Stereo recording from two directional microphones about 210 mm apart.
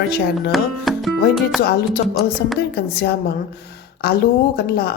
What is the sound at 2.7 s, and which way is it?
Speech, 50° left (ahead or behind).